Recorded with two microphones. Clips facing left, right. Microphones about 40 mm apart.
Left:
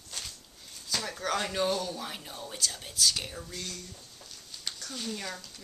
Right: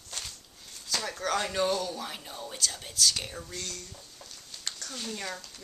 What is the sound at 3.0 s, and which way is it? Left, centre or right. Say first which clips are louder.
Speech: right 1 dB; centre.